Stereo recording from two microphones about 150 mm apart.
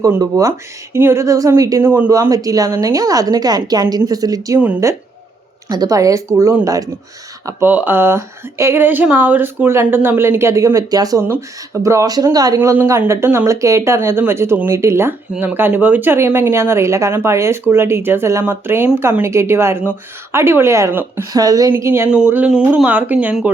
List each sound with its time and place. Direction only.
0.0 s speech: 20° right (ahead or behind)
5.6 s speech: 25° right (ahead or behind); by 23.5 s 10° right (ahead or behind)